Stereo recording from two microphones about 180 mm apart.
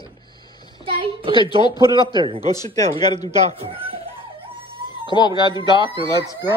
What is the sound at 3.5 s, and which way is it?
Speech, 30° right (ahead or behind).